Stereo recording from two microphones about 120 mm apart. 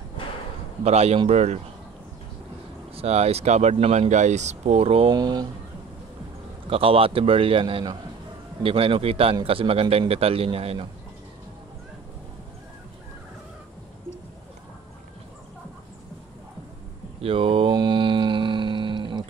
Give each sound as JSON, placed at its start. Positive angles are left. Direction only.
{"t": 0.8, "sound": "speech", "side_deg": -60}
{"t": 3.0, "sound": "speech", "side_deg": -60}
{"t": 5.1, "sound": "speech", "side_deg": -35}
{"t": 6.7, "sound": "a man's voice", "side_deg": -50}
{"t": 17.2, "sound": "a man's voice", "side_deg": -50}
{"t": 17.7, "sound": "mantra", "side_deg": -40}